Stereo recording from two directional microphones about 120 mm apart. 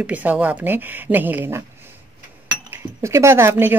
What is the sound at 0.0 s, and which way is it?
Speech, 15° right (ahead or behind).